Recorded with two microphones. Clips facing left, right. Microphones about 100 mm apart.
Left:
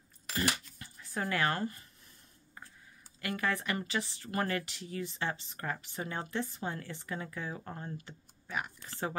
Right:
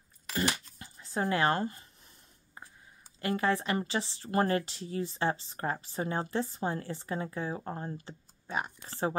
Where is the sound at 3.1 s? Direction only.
30° right (ahead or behind).